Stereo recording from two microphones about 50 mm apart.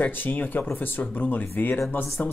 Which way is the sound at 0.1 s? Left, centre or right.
Left.